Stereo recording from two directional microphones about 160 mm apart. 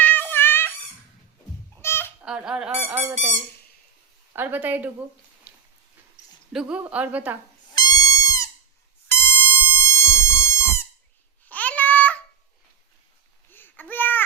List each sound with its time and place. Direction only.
0.0 s a sound: 10° left (ahead or behind)
1.8 s a sound: 15° left (ahead or behind)
2.2 s speech: 5° right (ahead or behind)
4.4 s a woman's voice: 10° right (ahead or behind)
6.5 s a woman's voice: 5° right (ahead or behind)
7.8 s goat: 25° left (ahead or behind)
9.0 s music: 15° left (ahead or behind)
11.4 s babbling: 10° left (ahead or behind)
13.5 s a sound: 10° left (ahead or behind)